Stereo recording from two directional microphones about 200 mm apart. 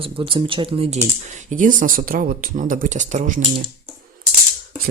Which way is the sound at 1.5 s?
40° right (ahead or behind).